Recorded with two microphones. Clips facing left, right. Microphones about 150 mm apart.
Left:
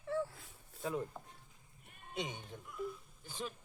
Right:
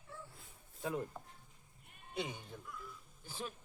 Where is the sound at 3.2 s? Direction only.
5° right (ahead or behind).